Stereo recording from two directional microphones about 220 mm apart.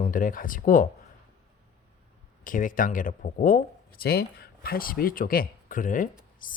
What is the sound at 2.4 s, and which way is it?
Speech, 35° left (ahead or behind).